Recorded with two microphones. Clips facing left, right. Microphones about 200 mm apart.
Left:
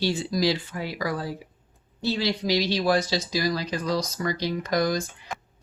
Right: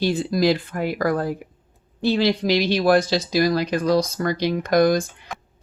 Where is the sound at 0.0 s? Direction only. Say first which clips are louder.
Right 5 dB; 55° right (ahead or behind).